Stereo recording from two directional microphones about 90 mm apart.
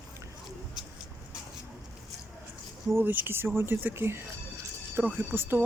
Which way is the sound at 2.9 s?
25° right (ahead or behind).